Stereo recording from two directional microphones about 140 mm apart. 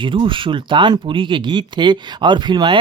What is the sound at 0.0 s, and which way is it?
Speech, 35° right (ahead or behind).